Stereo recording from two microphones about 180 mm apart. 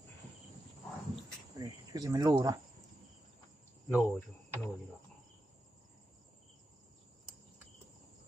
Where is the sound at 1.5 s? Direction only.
20° right (ahead or behind).